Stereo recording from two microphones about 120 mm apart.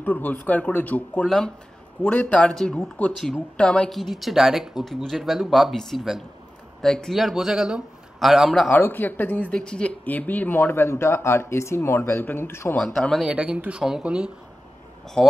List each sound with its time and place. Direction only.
0.0 s speech: 15° left (ahead or behind)
8.6 s speech: 15° left (ahead or behind)
12.7 s speech: 10° left (ahead or behind)
13.3 s speech: 10° right (ahead or behind)
15.2 s speech: 5° left (ahead or behind)